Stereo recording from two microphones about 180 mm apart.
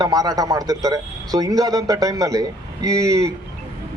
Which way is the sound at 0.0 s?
20° right (ahead or behind).